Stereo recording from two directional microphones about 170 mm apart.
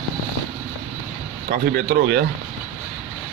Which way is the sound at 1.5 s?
55° right (ahead or behind).